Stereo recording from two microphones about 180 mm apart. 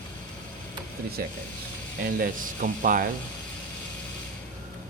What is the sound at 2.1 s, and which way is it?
Speech, 50° right (ahead or behind).